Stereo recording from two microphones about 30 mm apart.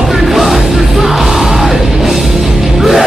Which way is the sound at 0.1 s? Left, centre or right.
Centre.